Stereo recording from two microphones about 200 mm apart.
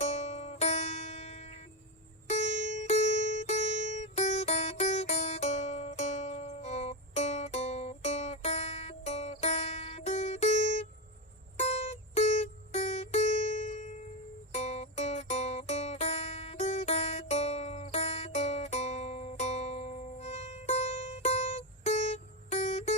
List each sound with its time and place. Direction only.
0.0 s music: 35° left (ahead or behind)